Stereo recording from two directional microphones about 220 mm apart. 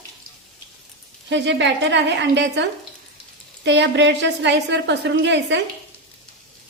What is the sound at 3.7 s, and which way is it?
A woman's voice, 55° right (ahead or behind).